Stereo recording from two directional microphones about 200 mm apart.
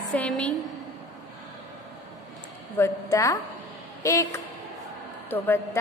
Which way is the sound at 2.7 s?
15° left (ahead or behind).